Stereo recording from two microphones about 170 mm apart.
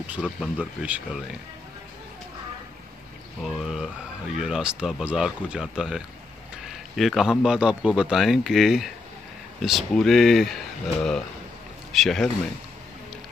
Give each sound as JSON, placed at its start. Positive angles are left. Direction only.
{"t": 0.0, "sound": "speech", "side_deg": -5}
{"t": 3.4, "sound": "a man's voice", "side_deg": 0}